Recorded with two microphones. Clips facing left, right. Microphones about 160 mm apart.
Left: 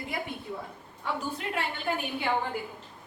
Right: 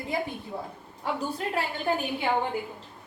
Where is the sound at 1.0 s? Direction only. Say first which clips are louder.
Right 3 dB; 35° right (ahead or behind).